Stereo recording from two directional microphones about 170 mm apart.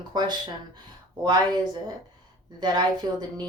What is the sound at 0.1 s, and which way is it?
Speech, 25° right (ahead or behind).